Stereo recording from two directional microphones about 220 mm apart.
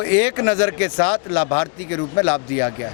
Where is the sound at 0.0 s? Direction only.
15° left (ahead or behind).